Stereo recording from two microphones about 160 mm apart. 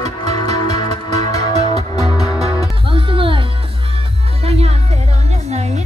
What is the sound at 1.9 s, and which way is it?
Music, 25° left (ahead or behind).